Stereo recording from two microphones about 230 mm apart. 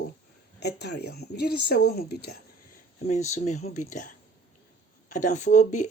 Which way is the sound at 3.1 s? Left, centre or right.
Left.